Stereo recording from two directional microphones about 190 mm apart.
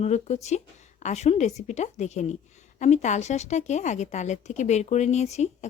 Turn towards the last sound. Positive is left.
turn(degrees=35)  # may be behind; listen again after turning